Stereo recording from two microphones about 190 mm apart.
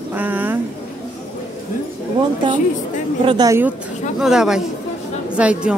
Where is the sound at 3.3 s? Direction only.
20° right (ahead or behind).